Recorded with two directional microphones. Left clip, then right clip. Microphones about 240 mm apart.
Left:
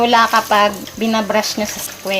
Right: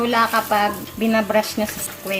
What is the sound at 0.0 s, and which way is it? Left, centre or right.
Speech, left.